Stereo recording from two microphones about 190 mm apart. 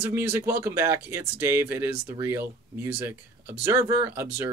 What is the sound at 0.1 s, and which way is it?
Speech, 10° right (ahead or behind).